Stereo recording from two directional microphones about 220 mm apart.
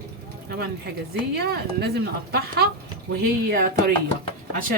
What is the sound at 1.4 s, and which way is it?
A woman's voice, 45° right (ahead or behind).